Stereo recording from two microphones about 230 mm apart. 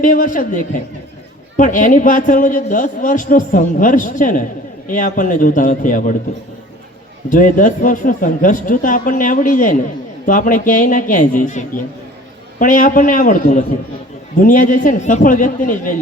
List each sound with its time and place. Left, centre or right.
0.0 s a man's voice: left
7.3 s a man's voice: left